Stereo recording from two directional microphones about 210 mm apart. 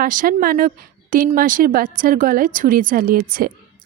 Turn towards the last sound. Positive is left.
turn(degrees=-40)  # may be behind; listen again after turning